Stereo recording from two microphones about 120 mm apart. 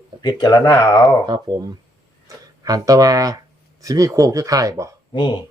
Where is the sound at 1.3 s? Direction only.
30° right (ahead or behind).